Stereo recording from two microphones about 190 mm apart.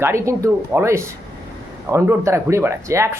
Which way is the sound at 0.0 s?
15° right (ahead or behind).